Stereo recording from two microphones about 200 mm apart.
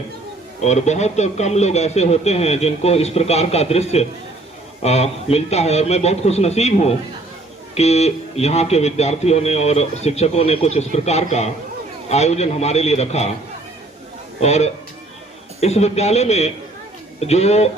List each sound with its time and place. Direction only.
0.6 s speech: 35° left (ahead or behind)
14.4 s speech: 35° left (ahead or behind)